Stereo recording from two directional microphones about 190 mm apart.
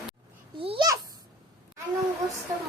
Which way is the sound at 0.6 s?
25° right (ahead or behind).